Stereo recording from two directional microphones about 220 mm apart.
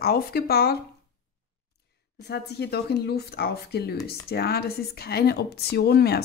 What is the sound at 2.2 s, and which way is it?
A woman's voice, 50° left (ahead or behind).